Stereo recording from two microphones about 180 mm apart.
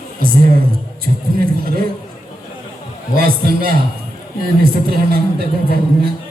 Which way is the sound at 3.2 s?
55° right (ahead or behind).